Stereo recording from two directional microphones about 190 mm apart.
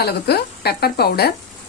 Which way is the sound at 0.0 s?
55° left (ahead or behind).